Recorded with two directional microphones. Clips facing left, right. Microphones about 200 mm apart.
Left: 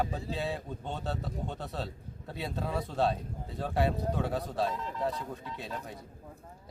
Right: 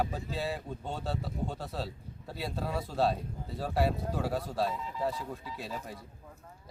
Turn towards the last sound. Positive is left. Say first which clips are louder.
# even
turn(degrees=-5)  # may be behind; listen again after turning